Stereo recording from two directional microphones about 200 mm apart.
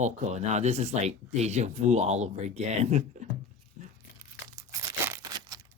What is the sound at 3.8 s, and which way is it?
Tearing, 40° right (ahead or behind).